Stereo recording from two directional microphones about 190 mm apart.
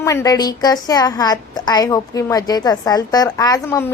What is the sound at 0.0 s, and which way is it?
A woman's voice, 15° left (ahead or behind).